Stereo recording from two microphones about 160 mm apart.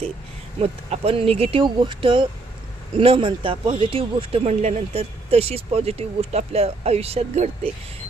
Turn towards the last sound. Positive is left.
turn(degrees=-40)  # may be behind; listen again after turning